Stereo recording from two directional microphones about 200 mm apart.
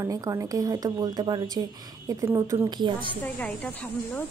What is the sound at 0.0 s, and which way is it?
A woman's voice, 15° right (ahead or behind).